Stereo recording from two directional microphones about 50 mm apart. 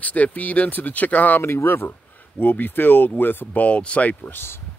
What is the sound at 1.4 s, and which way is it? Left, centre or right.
Speech, left.